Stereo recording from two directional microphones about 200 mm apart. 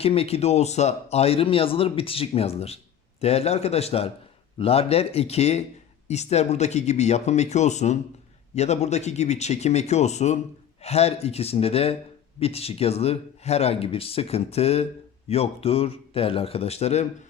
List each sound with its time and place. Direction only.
0.0 s speech: 30° left (ahead or behind)